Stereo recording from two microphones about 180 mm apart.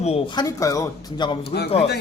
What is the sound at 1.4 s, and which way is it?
Speech, 65° left (ahead or behind).